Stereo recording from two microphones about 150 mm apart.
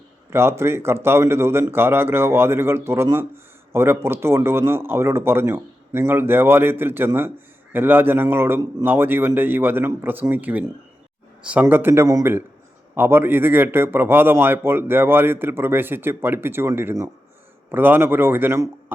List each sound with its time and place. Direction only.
0.3 s speech: 15° right (ahead or behind)